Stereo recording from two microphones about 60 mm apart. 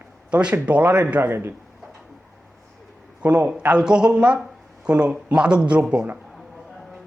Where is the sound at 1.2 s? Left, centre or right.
Right.